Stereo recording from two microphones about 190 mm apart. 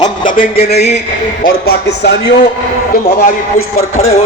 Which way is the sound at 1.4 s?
55° left (ahead or behind).